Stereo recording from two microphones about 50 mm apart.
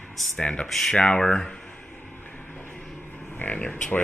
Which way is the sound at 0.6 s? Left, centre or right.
Centre.